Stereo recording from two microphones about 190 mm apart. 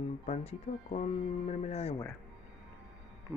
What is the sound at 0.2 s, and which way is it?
Speech, 35° left (ahead or behind).